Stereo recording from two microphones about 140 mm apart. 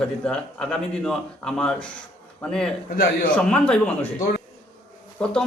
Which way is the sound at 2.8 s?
90° left.